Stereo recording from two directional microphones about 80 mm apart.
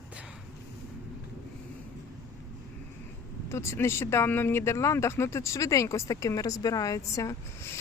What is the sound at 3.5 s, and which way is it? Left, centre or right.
Speech, left.